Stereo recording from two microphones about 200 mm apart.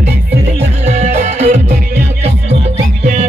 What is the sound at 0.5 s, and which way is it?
Music, 35° right (ahead or behind).